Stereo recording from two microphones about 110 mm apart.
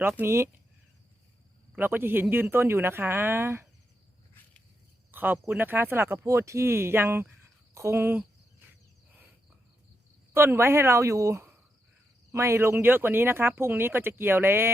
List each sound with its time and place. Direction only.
0.2 s speech: 25° right (ahead or behind)
1.7 s speech: 15° right (ahead or behind)
5.1 s speech: 15° right (ahead or behind)
10.3 s speech: 20° right (ahead or behind)